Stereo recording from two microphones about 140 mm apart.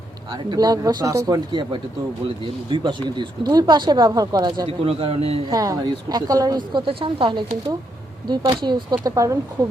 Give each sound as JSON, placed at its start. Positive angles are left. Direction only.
{"t": 0.3, "sound": "speech", "side_deg": -30}
{"t": 5.5, "sound": "speech", "side_deg": -25}